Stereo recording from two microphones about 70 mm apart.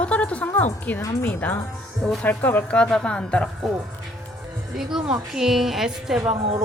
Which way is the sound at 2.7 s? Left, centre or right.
Centre.